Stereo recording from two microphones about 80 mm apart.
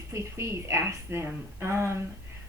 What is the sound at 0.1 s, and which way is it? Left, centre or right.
A woman's voice, right.